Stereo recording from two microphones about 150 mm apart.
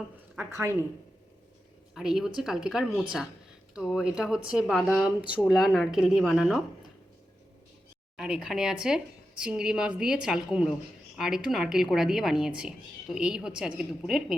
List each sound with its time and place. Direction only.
0.3 s speech: 15° right (ahead or behind)
2.0 s speech: 5° right (ahead or behind)
8.1 s speech: 5° right (ahead or behind)